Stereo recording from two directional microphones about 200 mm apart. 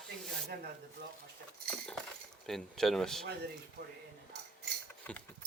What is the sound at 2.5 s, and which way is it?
Speech, centre (ahead or behind).